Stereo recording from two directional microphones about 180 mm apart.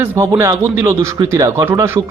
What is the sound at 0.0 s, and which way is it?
A man's voice, 15° right (ahead or behind).